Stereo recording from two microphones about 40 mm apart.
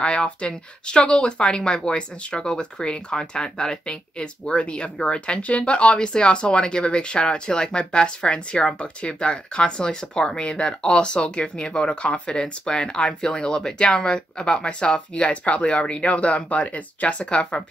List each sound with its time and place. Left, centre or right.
0.0 s speech: left